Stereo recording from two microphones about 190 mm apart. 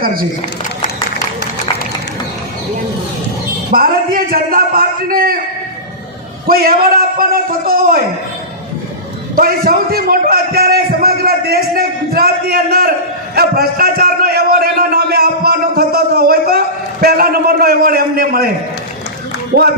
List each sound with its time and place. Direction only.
0.0 s a man's voice: 50° right (ahead or behind)
3.7 s a man's voice: 50° right (ahead or behind)
6.5 s a man's voice: 50° right (ahead or behind)
9.3 s a man's voice: 50° right (ahead or behind)
13.3 s a sound: 55° right (ahead or behind)
19.5 s a man's voice: 50° right (ahead or behind)